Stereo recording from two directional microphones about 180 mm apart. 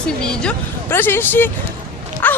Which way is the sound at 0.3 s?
10° left (ahead or behind).